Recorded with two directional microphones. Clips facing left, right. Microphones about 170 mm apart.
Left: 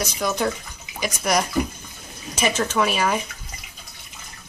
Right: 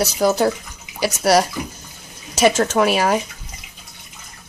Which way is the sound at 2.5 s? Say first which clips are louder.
Right 5 dB; 40° right (ahead or behind).